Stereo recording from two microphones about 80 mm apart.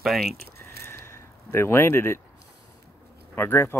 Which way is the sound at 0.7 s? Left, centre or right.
Left.